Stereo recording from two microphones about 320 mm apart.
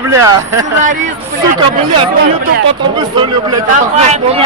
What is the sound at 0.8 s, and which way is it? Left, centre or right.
Speech, right.